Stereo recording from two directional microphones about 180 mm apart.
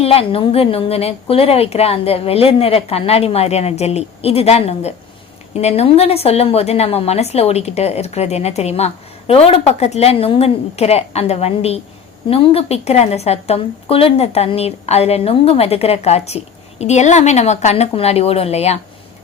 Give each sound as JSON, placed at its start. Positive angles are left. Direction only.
{"t": 0.0, "sound": "a woman's voice", "side_deg": 35}